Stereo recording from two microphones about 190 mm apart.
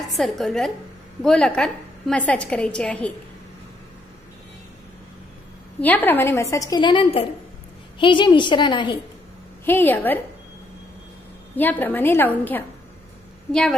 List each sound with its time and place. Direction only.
0.1 s a woman's voice: centre (ahead or behind)
5.8 s a woman's voice: 10° left (ahead or behind); by 8.9 s 25° left (ahead or behind)
9.7 s a woman's voice: 10° left (ahead or behind)
11.5 s a woman's voice: 10° left (ahead or behind)